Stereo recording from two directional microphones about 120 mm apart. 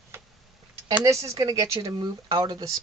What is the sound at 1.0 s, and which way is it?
Speech, 25° right (ahead or behind).